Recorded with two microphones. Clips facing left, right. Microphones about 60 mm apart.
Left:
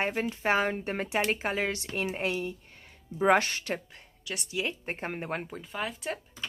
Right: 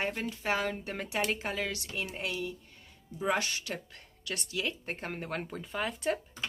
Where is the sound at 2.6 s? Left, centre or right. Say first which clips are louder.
Left 3 dB; left.